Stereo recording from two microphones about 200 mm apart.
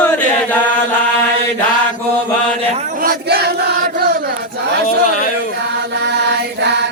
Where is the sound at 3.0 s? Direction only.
50° right (ahead or behind).